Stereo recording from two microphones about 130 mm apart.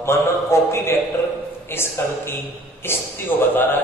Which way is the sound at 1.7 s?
20° left (ahead or behind).